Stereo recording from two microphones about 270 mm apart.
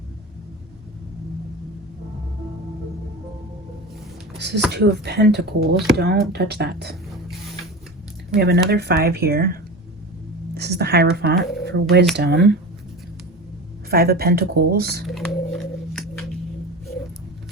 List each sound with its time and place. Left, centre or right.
4.4 s speech: right
8.4 s a woman's voice: right
13.9 s speech: right
15.0 s a sound: centre